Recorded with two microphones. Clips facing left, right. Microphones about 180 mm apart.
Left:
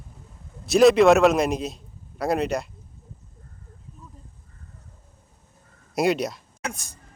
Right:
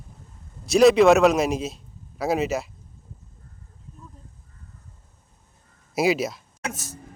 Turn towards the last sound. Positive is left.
turn(degrees=-5)  # may be behind; listen again after turning